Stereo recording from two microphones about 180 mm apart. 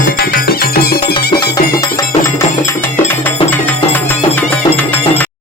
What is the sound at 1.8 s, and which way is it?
Music, 15° left (ahead or behind).